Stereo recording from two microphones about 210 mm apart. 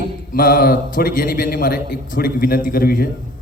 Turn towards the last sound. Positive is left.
turn(degrees=45)  # may be behind; listen again after turning